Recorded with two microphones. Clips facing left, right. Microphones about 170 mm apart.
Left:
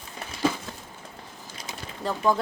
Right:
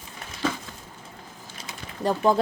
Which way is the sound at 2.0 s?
20° right (ahead or behind).